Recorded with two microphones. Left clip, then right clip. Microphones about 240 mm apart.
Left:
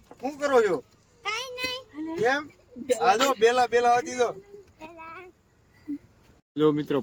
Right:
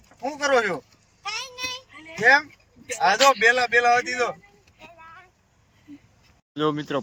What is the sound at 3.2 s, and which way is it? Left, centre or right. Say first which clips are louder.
Speech: right 4 dB; centre.